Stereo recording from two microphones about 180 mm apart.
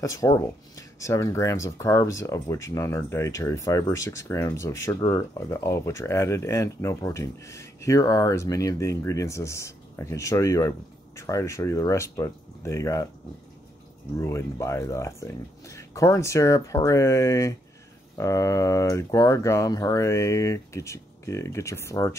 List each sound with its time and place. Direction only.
0.0 s speech: 20° left (ahead or behind)
14.1 s speech: 15° left (ahead or behind)